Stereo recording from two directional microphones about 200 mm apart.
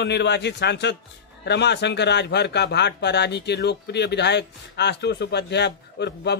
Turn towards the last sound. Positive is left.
turn(degrees=60)  # may be behind; listen again after turning